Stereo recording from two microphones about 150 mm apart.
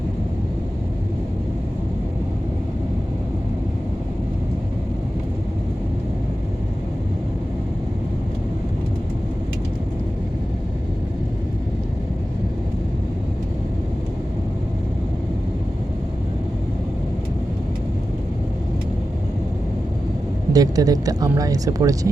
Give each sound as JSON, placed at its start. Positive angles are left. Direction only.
{"t": 20.5, "sound": "speech", "side_deg": -25}